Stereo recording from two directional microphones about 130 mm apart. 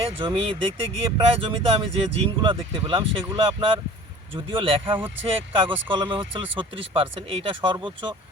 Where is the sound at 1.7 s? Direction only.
45° right (ahead or behind).